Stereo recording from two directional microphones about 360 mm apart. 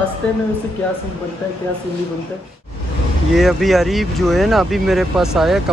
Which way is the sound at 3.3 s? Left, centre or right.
Centre.